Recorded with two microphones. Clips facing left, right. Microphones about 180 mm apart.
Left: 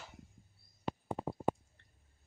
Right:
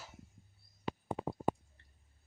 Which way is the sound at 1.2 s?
90° right.